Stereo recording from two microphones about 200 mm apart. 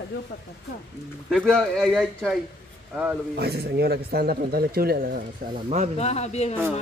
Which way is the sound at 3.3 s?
55° right (ahead or behind).